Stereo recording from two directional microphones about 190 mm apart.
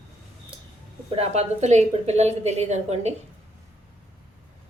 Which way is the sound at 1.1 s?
35° right (ahead or behind).